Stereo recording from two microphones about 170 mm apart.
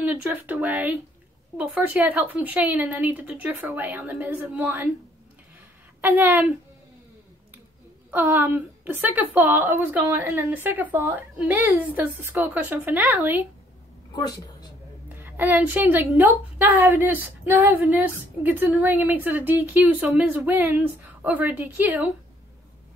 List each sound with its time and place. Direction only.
0.0 s a woman's voice: 10° right (ahead or behind)
5.9 s a woman's voice: 10° right (ahead or behind)
8.1 s a woman's voice: 15° right (ahead or behind)
14.1 s a woman's voice: 25° left (ahead or behind)
15.0 s a woman's voice: 15° right (ahead or behind)